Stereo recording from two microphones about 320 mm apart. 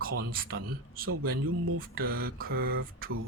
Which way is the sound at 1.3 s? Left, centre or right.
Right.